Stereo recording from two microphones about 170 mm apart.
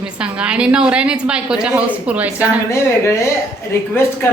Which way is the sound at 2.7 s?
15° left (ahead or behind).